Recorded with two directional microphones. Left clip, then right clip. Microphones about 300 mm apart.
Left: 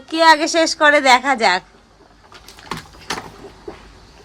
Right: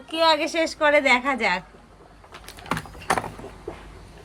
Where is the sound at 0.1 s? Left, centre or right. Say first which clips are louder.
Left 8 dB; centre.